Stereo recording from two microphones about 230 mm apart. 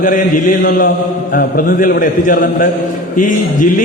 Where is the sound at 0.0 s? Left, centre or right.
Left.